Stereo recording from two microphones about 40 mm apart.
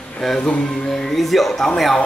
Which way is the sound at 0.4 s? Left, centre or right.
Left.